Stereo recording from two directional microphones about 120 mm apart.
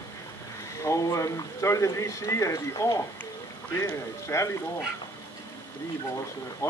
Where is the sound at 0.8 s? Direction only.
25° left (ahead or behind).